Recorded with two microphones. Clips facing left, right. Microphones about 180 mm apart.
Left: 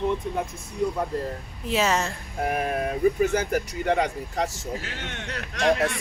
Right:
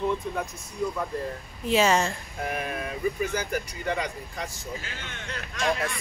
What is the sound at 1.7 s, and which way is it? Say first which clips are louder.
Speech: right 2 dB; centre (ahead or behind).